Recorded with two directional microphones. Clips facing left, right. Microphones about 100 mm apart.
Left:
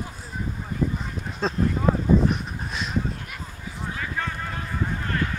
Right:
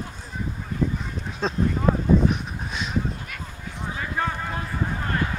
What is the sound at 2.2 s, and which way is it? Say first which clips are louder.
Goose: right 1 dB; centre (ahead or behind).